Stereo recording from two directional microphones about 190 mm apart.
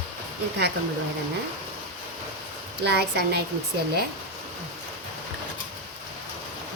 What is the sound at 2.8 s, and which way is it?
Speech, 60° right (ahead or behind).